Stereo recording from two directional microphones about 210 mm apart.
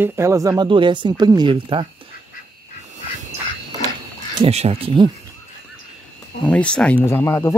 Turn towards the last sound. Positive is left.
turn(degrees=15)  # may be behind; listen again after turning